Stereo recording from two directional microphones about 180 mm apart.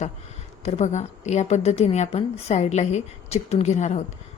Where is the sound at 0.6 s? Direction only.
40° left (ahead or behind).